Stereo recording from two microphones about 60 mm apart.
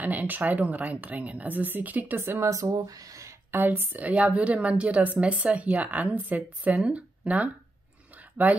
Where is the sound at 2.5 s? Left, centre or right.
Right.